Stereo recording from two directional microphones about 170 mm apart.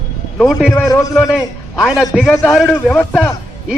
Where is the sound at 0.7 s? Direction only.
15° left (ahead or behind).